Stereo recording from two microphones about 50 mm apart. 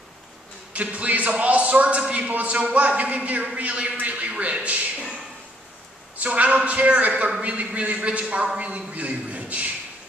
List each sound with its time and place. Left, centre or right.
0.7 s a man's voice: right
6.1 s a man's voice: right